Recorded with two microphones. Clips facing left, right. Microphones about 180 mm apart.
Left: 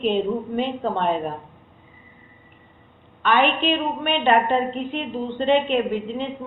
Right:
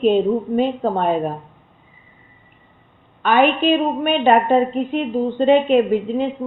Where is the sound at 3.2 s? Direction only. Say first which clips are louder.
Right 4 dB; 45° right (ahead or behind).